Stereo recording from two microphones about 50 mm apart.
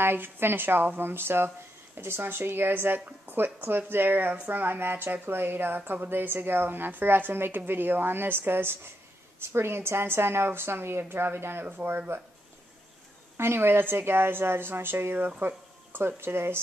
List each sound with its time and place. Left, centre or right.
0.0 s a woman's voice: right
13.4 s a woman's voice: right
15.1 s speech: right